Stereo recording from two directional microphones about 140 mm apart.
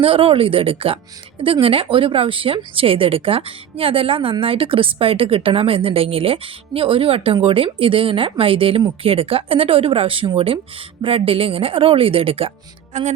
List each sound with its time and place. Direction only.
0.0 s speech: 40° right (ahead or behind)
12.9 s speech: 55° right (ahead or behind)